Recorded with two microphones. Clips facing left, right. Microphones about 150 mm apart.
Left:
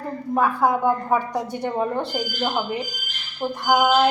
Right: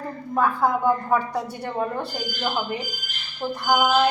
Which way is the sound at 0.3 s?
10° left (ahead or behind).